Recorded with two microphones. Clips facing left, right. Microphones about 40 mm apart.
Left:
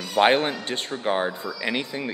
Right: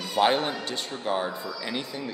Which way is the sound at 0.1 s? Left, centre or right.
Left.